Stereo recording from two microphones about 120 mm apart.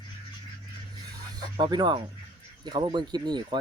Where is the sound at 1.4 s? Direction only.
35° right (ahead or behind).